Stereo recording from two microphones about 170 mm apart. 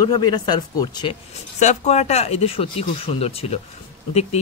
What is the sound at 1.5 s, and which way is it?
Speech, 40° left (ahead or behind).